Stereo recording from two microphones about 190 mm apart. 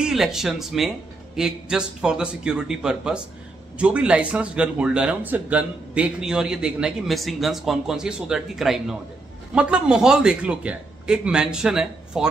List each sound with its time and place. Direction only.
0.0 s speech: centre (ahead or behind)